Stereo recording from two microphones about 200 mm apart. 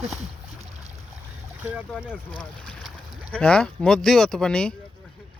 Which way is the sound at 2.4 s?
5° left (ahead or behind).